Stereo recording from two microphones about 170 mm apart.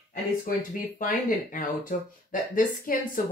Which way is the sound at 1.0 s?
55° left (ahead or behind).